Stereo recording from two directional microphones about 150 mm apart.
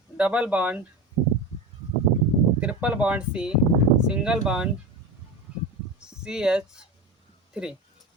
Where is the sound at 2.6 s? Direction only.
5° right (ahead or behind).